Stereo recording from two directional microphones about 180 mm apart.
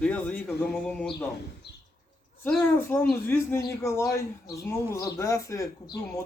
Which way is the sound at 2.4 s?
10° left (ahead or behind).